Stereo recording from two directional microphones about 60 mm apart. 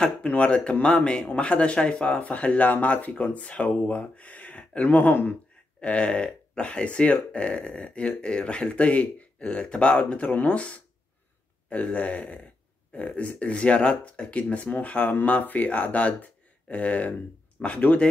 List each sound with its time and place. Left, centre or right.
0.0 s speech: centre
11.9 s speech: left